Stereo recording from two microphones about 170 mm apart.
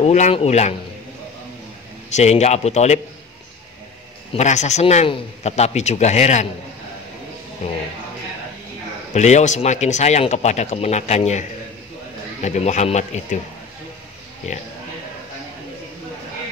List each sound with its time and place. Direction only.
0.0 s speech: 40° left (ahead or behind)
2.1 s speech: 40° left (ahead or behind)
4.3 s speech: 40° left (ahead or behind)
7.6 s speech: 40° left (ahead or behind)
9.1 s speech: 45° left (ahead or behind)